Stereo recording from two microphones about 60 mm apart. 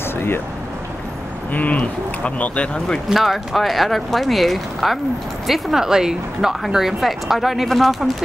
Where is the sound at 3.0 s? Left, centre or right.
Centre.